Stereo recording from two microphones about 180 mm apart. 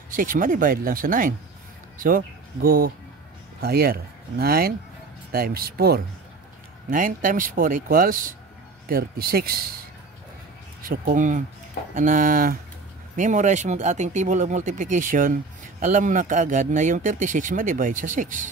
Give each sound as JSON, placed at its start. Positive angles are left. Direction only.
{"t": 0.1, "sound": "speech", "side_deg": -50}
{"t": 6.9, "sound": "speech", "side_deg": -50}
{"t": 10.8, "sound": "speech", "side_deg": -50}